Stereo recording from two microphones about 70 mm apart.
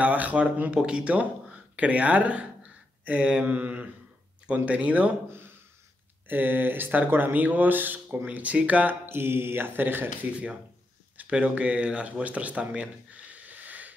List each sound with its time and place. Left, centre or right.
0.0 s speech: right
6.2 s speech: right
11.1 s speech: centre